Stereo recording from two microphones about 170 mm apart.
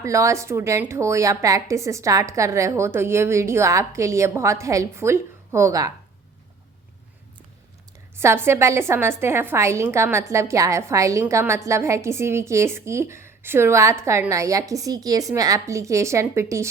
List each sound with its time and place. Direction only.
0.0 s a woman's voice: 20° right (ahead or behind)
8.1 s a woman's voice: 15° right (ahead or behind)